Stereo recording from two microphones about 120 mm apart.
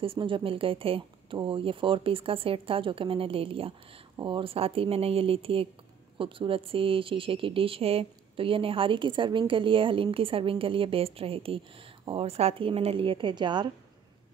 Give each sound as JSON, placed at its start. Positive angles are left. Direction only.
{"t": 0.0, "sound": "speech", "side_deg": -45}